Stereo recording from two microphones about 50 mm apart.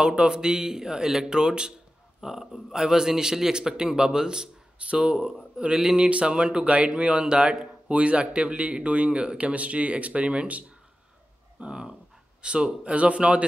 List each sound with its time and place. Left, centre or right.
0.0 s speech: centre
11.6 s speech: centre